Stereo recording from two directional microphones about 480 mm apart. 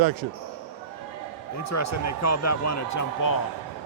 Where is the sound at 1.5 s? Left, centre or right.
Left.